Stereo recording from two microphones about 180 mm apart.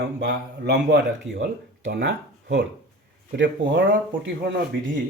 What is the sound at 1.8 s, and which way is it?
Speech, 90° right.